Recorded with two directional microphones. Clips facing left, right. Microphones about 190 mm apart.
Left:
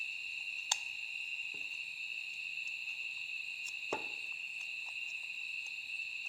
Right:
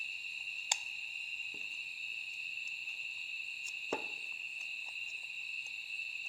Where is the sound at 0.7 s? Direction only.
15° right (ahead or behind).